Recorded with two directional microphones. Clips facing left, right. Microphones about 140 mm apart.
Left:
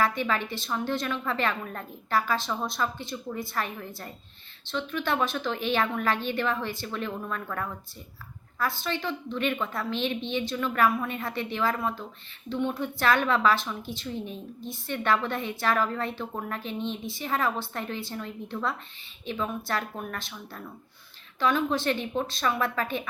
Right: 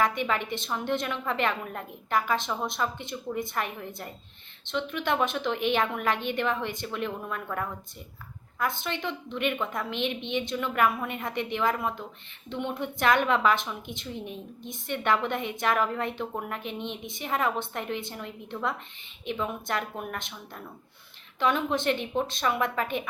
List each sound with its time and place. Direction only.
0.0 s a woman's voice: 20° right (ahead or behind)
21.3 s a woman's voice: 20° right (ahead or behind)